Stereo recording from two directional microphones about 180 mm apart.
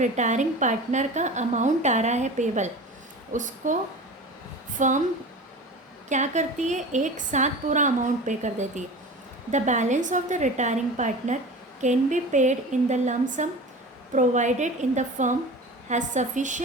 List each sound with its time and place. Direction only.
0.0 s a woman's voice: 40° right (ahead or behind)
4.8 s a woman's voice: 45° right (ahead or behind)
6.1 s a woman's voice: 40° right (ahead or behind)